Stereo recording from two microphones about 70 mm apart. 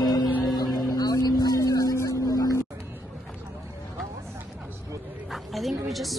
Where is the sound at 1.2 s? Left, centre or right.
Left.